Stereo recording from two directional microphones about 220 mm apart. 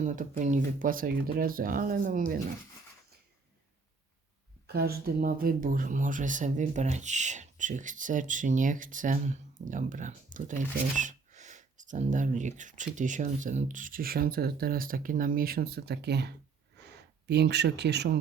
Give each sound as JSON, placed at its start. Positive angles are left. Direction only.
{"t": 0.0, "sound": "speech", "side_deg": -35}
{"t": 4.6, "sound": "speech", "side_deg": -45}